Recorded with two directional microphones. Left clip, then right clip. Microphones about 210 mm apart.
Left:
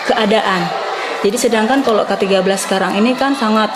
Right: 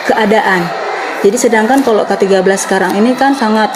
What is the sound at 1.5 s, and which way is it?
A woman's voice, 30° right (ahead or behind).